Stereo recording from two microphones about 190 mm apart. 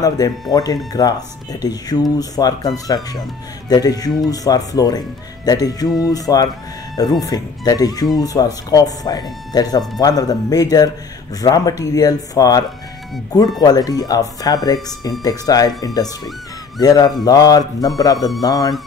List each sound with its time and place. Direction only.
0.0 s speech: 20° left (ahead or behind)